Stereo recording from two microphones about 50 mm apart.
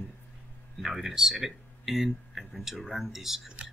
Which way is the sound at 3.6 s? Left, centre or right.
Right.